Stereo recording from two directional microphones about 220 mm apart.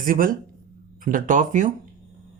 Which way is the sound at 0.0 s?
40° right (ahead or behind).